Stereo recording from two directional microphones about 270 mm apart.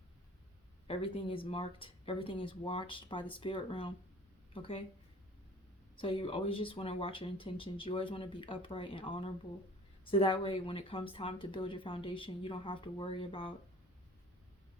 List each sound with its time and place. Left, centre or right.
0.9 s speech: left
6.0 s speech: centre